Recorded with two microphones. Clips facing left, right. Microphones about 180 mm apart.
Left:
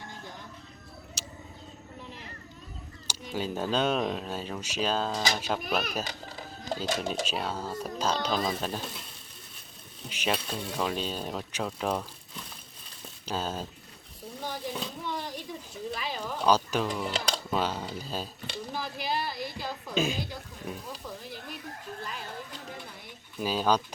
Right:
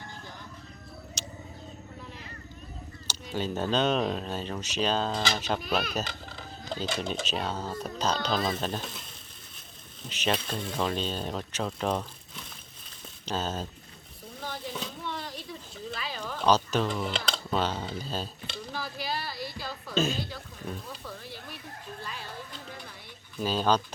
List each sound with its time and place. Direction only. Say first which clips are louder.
1.2 s vehicle: right 2 dB; 5° left (ahead or behind)
3.1 s speech: right 1 dB; 10° left (ahead or behind)
10.1 s speech: right 1 dB; 10° left (ahead or behind)
14.4 s a sound: left 2 dB; 10° left (ahead or behind)
15.9 s speech: left 2 dB; 15° left (ahead or behind)
19.2 s a sound: left 2 dB; 50° left (ahead or behind)
19.6 s music: right 1 dB; 10° left (ahead or behind)
23.4 s speech: even; 10° left (ahead or behind)